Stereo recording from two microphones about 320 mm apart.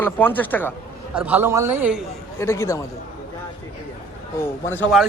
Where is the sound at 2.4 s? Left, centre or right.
Centre.